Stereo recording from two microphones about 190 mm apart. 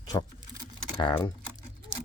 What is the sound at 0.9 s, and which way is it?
Speech, 25° left (ahead or behind).